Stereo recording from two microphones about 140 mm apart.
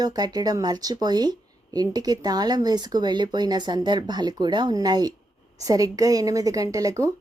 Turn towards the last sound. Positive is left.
turn(degrees=-25)  # may be behind; listen again after turning